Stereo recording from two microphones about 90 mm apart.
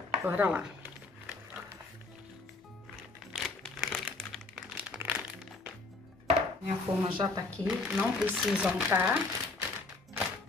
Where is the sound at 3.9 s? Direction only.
10° left (ahead or behind).